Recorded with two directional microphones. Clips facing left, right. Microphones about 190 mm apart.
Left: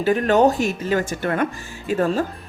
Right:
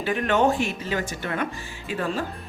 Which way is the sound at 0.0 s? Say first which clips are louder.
Left 6 dB; 40° left (ahead or behind).